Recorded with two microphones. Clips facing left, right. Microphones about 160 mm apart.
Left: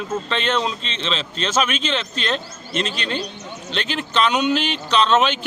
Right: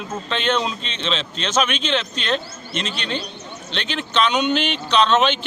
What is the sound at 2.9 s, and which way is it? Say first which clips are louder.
Speech: left 1 dB; 40° left (ahead or behind).